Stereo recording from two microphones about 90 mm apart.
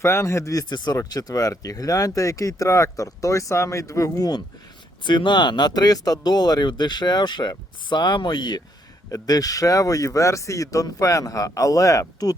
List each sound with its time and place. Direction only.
0.0 s speech: 30° left (ahead or behind)
0.7 s speech: 55° left (ahead or behind)
1.1 s speech: 40° left (ahead or behind)
5.0 s speech: 60° left (ahead or behind)
9.0 s speech: 40° left (ahead or behind)